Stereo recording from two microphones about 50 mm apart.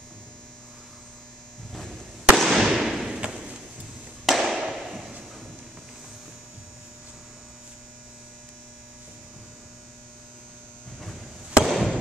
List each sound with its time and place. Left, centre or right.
2.3 s fireworks: centre
3.1 s thump: centre
4.3 s a sound: centre
11.6 s fireworks: centre